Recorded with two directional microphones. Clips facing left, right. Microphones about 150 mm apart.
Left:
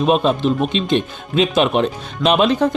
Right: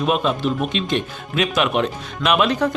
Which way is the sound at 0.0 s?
30° left (ahead or behind).